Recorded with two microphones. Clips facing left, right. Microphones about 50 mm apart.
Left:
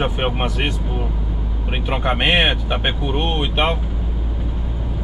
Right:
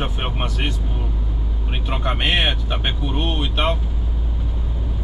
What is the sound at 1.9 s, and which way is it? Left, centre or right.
Speech, left.